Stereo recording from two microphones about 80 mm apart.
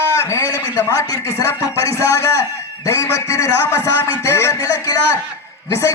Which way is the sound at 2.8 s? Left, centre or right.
Left.